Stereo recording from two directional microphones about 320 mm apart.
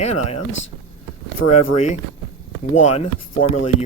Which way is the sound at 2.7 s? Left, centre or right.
Left.